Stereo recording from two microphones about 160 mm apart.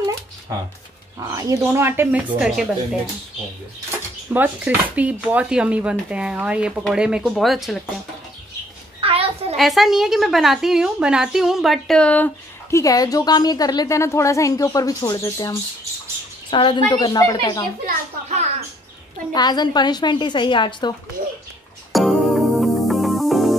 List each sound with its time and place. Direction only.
0.0 s a sound: 20° right (ahead or behind)
1.2 s a woman's voice: 20° right (ahead or behind); by 3.0 s 5° right (ahead or behind)
4.3 s a woman's voice: 10° right (ahead or behind)
9.0 s a sound: 35° right (ahead or behind)
9.6 s a woman's voice: centre (ahead or behind)
12.7 s a woman's voice: 20° left (ahead or behind)
16.4 s a woman's voice: 30° left (ahead or behind)
19.3 s a woman's voice: 25° left (ahead or behind)
21.9 s music: centre (ahead or behind)